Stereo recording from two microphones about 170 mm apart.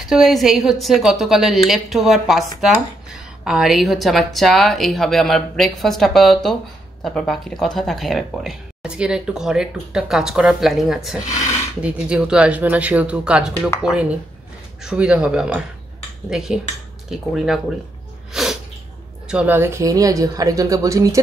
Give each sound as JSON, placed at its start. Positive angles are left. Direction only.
{"t": 0.0, "sound": "a woman's voice", "side_deg": 0}
{"t": 14.8, "sound": "a woman's voice", "side_deg": -5}
{"t": 18.3, "sound": "sneeze", "side_deg": 0}
{"t": 19.2, "sound": "speech", "side_deg": -10}